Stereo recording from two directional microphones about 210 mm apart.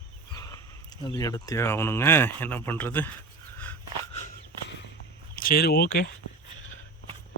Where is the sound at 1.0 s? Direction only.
15° left (ahead or behind).